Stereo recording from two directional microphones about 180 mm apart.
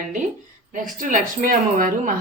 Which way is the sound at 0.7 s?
50° right (ahead or behind).